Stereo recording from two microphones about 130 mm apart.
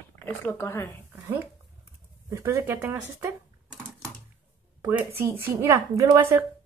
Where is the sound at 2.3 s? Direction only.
25° right (ahead or behind).